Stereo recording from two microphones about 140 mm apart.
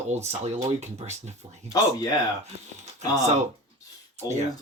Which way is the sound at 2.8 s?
55° right (ahead or behind).